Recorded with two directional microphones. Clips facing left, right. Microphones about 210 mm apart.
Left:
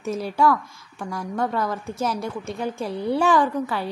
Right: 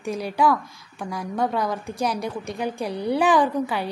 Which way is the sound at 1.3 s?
5° right (ahead or behind).